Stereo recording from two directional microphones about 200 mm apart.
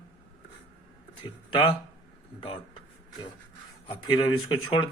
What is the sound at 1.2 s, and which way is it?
Speech, 25° left (ahead or behind).